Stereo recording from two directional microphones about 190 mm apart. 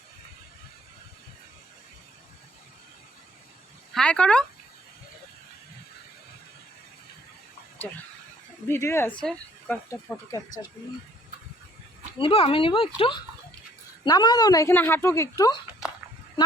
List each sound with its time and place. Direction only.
3.9 s speech: 5° left (ahead or behind)
8.6 s speech: 15° left (ahead or behind)
12.1 s speech: 30° left (ahead or behind)